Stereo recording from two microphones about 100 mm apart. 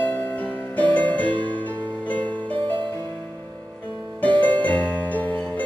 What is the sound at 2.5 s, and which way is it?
Music, 60° right (ahead or behind).